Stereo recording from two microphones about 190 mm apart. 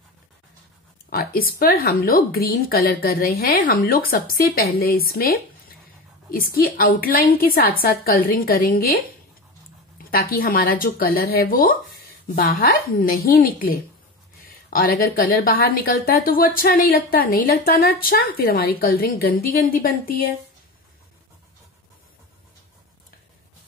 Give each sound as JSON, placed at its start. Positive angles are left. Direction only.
{"t": 1.1, "sound": "a woman's voice", "side_deg": 50}